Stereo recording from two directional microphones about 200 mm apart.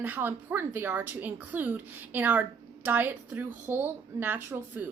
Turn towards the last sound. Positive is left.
turn(degrees=-10)  # may be behind; listen again after turning